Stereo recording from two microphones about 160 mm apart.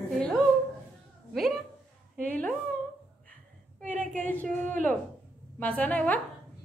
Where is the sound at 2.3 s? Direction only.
10° left (ahead or behind).